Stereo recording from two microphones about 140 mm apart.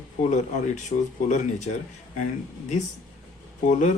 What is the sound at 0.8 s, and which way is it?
Speech, 60° left (ahead or behind).